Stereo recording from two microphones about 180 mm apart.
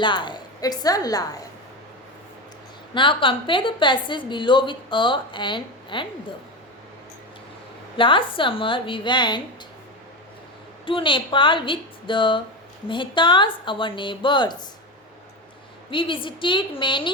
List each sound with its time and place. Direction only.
0.0 s a woman's voice: 25° left (ahead or behind)
2.9 s a woman's voice: 25° left (ahead or behind)
7.9 s a woman's voice: 30° left (ahead or behind)
10.8 s a woman's voice: 30° left (ahead or behind)
15.9 s a woman's voice: 30° left (ahead or behind)